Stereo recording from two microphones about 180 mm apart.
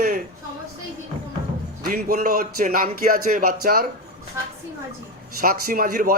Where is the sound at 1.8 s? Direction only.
50° right (ahead or behind).